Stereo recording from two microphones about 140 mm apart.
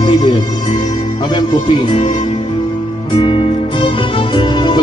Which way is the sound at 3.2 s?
35° left (ahead or behind).